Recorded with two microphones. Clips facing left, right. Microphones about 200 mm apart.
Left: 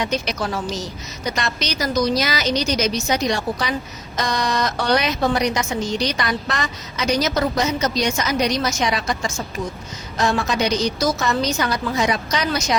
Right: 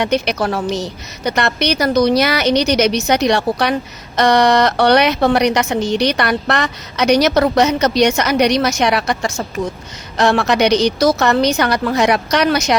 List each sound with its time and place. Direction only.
0.0 s a woman's voice: 65° right (ahead or behind)